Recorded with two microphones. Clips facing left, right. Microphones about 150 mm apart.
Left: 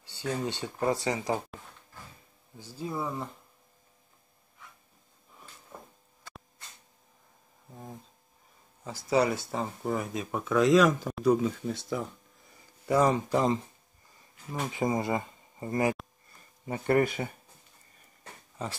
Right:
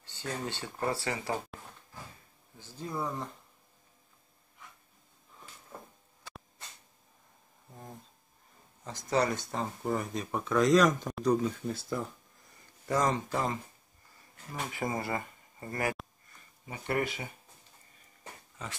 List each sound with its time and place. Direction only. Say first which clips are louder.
0.0 s speech: left 5 dB; 10° left (ahead or behind)
2.5 s speech: left 3 dB; 10° left (ahead or behind)
5.7 s a sound: even; centre (ahead or behind)
7.7 s speech: left 3 dB; 5° left (ahead or behind)
12.8 s speech: left 5 dB; 10° left (ahead or behind)
16.6 s speech: left 7 dB; 45° left (ahead or behind)